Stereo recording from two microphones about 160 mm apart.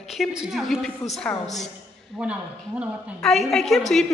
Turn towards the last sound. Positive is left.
turn(degrees=0)  # may be behind; listen again after turning